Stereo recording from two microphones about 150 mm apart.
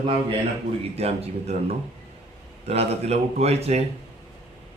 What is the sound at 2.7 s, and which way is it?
Speech, 45° right (ahead or behind).